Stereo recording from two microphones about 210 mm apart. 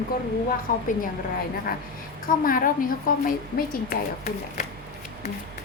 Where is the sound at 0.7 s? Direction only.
40° left (ahead or behind).